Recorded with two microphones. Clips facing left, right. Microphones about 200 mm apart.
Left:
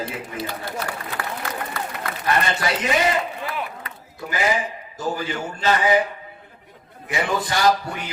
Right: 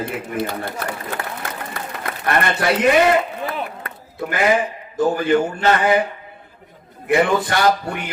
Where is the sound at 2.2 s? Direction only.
60° right (ahead or behind).